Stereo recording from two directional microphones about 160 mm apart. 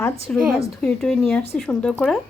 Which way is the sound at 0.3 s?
10° left (ahead or behind).